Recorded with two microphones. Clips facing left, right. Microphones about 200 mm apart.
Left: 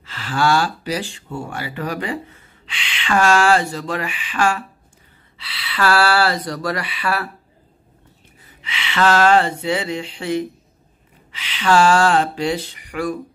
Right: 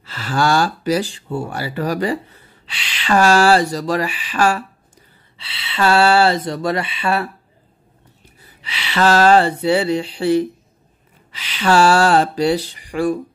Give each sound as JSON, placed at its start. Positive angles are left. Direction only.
{"t": 0.0, "sound": "speech", "side_deg": -40}
{"t": 5.4, "sound": "speech", "side_deg": -25}
{"t": 8.6, "sound": "speech", "side_deg": -35}